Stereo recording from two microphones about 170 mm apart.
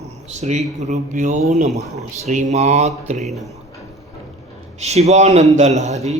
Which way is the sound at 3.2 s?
Centre (ahead or behind).